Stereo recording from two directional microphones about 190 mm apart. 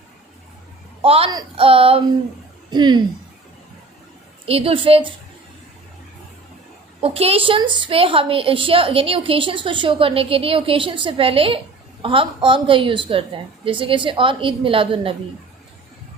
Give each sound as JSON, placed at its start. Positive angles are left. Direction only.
{"t": 1.0, "sound": "a woman's voice", "side_deg": -30}
{"t": 4.4, "sound": "a woman's voice", "side_deg": -30}
{"t": 7.0, "sound": "a woman's voice", "side_deg": -30}